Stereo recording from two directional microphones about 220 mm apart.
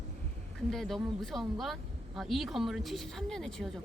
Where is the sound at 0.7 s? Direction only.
Centre (ahead or behind).